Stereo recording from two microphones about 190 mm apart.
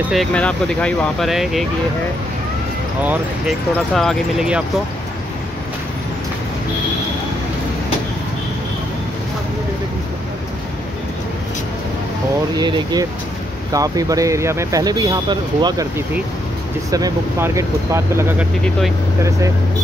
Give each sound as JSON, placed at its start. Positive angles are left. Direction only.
{"t": 0.1, "sound": "speech", "side_deg": 5}
{"t": 3.0, "sound": "speech", "side_deg": -10}
{"t": 12.5, "sound": "speech", "side_deg": -20}
{"t": 16.9, "sound": "speech", "side_deg": -15}